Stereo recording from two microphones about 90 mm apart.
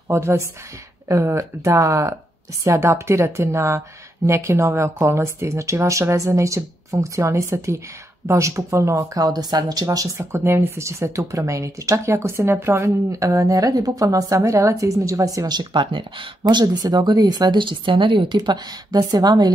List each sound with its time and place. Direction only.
0.1 s a woman's voice: 30° right (ahead or behind)
10.1 s speech: 25° right (ahead or behind); by 19.5 s 45° right (ahead or behind)